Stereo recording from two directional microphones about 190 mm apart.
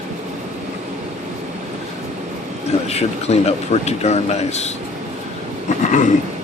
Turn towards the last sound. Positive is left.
turn(degrees=40)  # may be behind; listen again after turning